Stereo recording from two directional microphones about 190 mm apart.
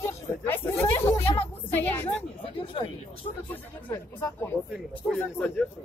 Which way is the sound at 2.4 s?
30° left (ahead or behind).